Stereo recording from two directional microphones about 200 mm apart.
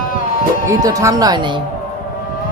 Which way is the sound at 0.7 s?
15° right (ahead or behind).